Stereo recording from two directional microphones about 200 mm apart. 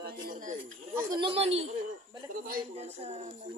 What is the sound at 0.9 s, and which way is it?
Speech, 20° right (ahead or behind).